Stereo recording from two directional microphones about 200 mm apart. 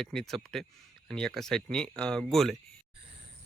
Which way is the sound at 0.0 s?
Centre (ahead or behind).